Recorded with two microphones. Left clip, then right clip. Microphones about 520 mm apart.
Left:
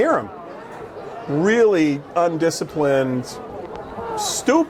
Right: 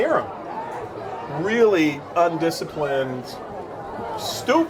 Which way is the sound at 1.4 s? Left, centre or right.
Left.